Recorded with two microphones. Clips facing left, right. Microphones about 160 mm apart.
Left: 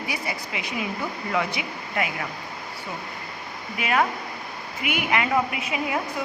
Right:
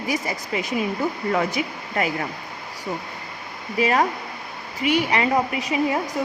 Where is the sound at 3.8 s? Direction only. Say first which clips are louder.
Right 3 dB; 35° right (ahead or behind).